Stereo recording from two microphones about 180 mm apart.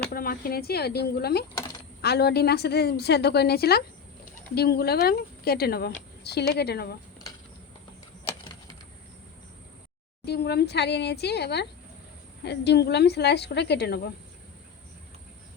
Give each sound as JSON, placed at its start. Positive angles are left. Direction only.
{"t": 0.1, "sound": "speech", "side_deg": 55}
{"t": 10.2, "sound": "a woman's voice", "side_deg": 65}